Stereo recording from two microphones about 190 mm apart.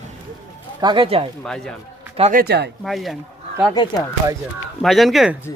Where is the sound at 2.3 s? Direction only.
60° right (ahead or behind).